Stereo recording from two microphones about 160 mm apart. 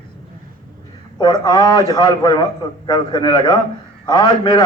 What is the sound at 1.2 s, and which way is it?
A man's voice, 25° left (ahead or behind).